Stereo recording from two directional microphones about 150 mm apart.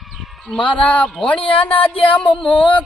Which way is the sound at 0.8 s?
10° left (ahead or behind).